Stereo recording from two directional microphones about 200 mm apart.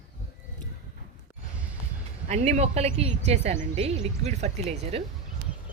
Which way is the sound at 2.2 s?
35° right (ahead or behind).